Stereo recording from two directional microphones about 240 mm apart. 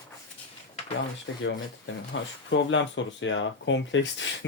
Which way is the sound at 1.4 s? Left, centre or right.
Left.